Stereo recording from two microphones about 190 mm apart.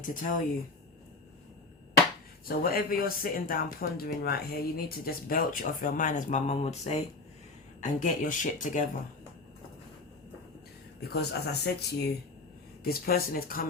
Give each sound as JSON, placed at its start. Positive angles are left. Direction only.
{"t": 0.0, "sound": "speech", "side_deg": 45}
{"t": 2.5, "sound": "speech", "side_deg": 50}
{"t": 11.1, "sound": "speech", "side_deg": 55}